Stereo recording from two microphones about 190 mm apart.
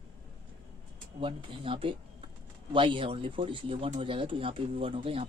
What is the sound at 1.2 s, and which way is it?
Speech, 25° right (ahead or behind).